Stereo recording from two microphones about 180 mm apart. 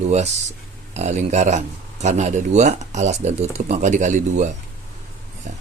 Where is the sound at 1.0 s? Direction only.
40° right (ahead or behind).